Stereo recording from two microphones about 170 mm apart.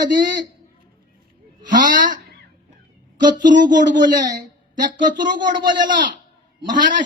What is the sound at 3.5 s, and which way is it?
Speech, 50° right (ahead or behind).